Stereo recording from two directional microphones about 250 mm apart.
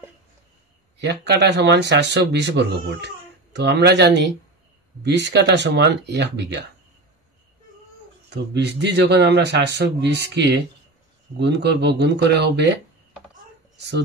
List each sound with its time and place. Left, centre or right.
1.0 s speech: right
8.3 s speech: right
13.7 s speech: right